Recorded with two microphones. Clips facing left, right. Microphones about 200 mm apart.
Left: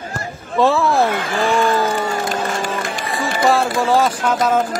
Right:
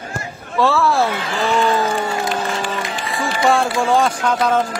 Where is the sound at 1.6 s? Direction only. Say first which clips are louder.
Left 1 dB; 45° left (ahead or behind).